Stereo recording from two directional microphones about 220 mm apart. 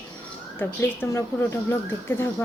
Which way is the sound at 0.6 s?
10° left (ahead or behind).